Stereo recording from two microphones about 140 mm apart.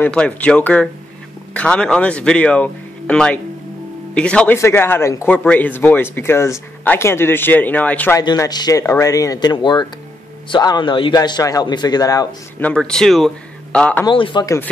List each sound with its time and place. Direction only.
0.0 s speech: 10° left (ahead or behind)
8.2 s a man's voice: 30° left (ahead or behind)
12.5 s a man's voice: 10° left (ahead or behind)
14.0 s a man's voice: 35° left (ahead or behind)
14.4 s speech: 20° left (ahead or behind)